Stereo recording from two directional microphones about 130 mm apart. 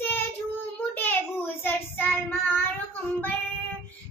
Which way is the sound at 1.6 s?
15° left (ahead or behind).